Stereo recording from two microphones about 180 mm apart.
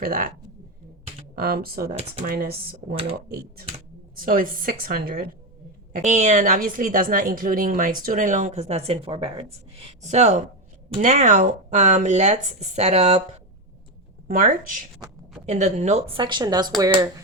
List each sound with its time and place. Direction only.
0.0 s a woman's voice: 50° right (ahead or behind)
1.4 s speech: 55° right (ahead or behind)
2.9 s speech: 30° right (ahead or behind)
4.1 s a woman's voice: 50° right (ahead or behind)
5.9 s a woman's voice: 40° right (ahead or behind)
14.3 s a woman's voice: 50° right (ahead or behind)
16.2 s speech: 25° right (ahead or behind)